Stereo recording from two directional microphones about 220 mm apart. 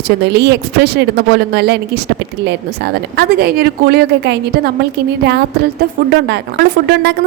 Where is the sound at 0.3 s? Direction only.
50° right (ahead or behind).